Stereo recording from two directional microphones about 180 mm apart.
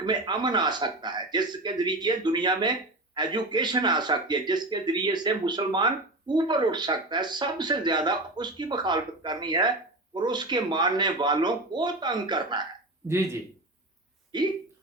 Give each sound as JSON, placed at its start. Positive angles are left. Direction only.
{"t": 0.0, "sound": "speech", "side_deg": -25}
{"t": 14.3, "sound": "speech", "side_deg": -25}